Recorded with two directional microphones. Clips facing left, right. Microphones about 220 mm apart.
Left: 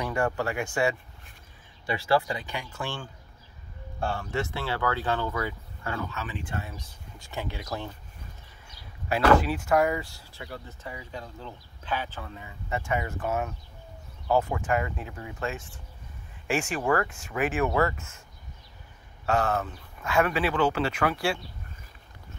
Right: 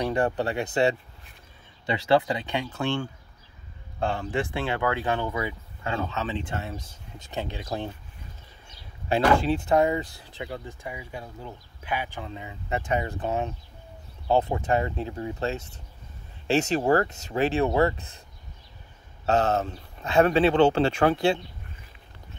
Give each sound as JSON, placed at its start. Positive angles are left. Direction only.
{"t": 0.0, "sound": "speech", "side_deg": -20}
{"t": 1.9, "sound": "speech", "side_deg": -20}
{"t": 4.0, "sound": "speech", "side_deg": -20}
{"t": 13.0, "sound": "speech", "side_deg": -30}
{"t": 13.3, "sound": "speech", "side_deg": -20}
{"t": 14.2, "sound": "speech", "side_deg": -30}
{"t": 19.5, "sound": "speech", "side_deg": -25}